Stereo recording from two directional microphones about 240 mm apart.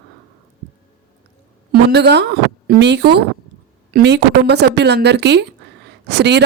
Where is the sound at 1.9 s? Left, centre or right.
Right.